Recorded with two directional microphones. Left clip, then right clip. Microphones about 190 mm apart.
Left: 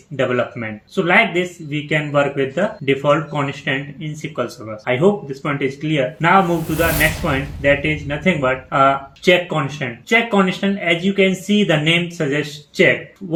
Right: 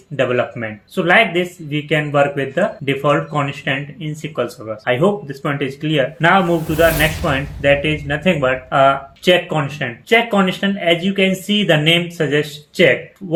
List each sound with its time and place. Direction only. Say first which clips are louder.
0.2 s speech: right 2 dB; 50° right (ahead or behind)